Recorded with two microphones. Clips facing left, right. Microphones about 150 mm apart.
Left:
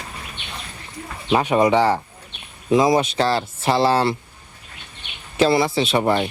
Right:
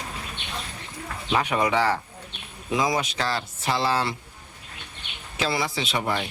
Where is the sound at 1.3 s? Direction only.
30° left (ahead or behind).